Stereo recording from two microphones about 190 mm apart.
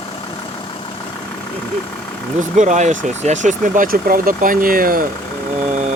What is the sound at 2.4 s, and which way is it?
Speech, 40° right (ahead or behind).